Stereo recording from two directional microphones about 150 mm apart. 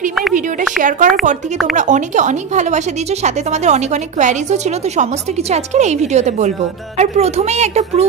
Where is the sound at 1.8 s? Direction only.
55° right (ahead or behind).